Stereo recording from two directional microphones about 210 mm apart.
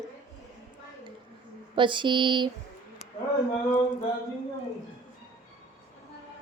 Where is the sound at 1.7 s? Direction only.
20° right (ahead or behind).